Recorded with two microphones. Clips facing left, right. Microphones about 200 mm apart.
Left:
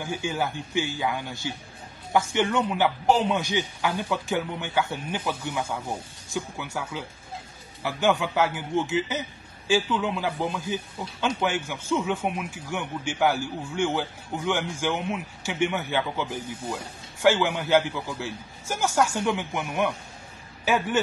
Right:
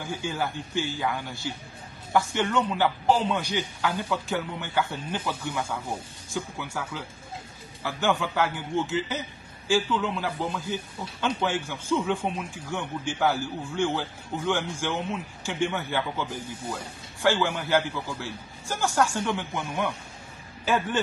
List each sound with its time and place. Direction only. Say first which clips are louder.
0.0 s speech: left 2 dB; 20° left (ahead or behind)